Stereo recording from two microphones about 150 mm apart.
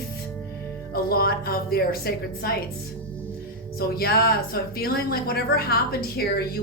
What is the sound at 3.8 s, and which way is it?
A woman's voice, 90° left.